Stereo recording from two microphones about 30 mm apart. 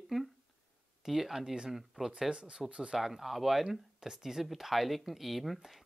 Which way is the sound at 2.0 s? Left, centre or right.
Right.